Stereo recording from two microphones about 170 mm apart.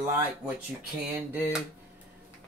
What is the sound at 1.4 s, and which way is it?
Speech, 10° right (ahead or behind).